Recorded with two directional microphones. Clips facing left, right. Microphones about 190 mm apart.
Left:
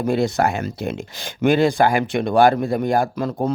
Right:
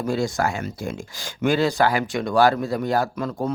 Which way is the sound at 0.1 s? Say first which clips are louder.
Left 4 dB; 60° left (ahead or behind).